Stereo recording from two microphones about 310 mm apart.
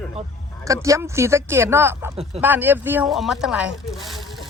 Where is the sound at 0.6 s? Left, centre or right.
Centre.